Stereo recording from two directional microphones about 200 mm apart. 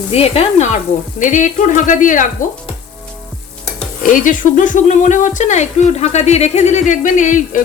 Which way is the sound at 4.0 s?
40° left (ahead or behind).